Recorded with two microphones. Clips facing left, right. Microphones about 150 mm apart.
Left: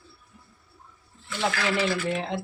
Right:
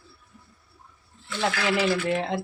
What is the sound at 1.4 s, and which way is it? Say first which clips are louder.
Speech: right 1 dB; 10° right (ahead or behind).